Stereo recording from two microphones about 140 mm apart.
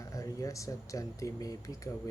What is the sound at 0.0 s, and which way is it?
Speech, 20° left (ahead or behind).